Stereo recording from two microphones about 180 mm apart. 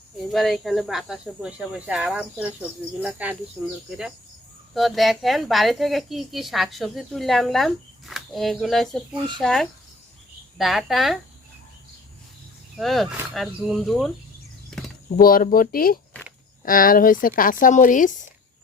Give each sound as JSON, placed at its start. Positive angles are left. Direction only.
{"t": 0.3, "sound": "a woman's voice", "side_deg": 0}
{"t": 4.7, "sound": "a woman's voice", "side_deg": 0}
{"t": 12.7, "sound": "a woman's voice", "side_deg": 0}
{"t": 15.2, "sound": "speech", "side_deg": 55}